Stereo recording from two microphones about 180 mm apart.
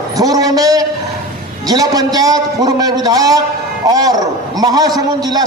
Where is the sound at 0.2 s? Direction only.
20° right (ahead or behind).